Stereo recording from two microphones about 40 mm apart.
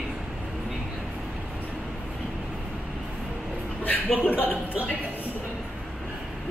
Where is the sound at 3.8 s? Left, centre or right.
Left.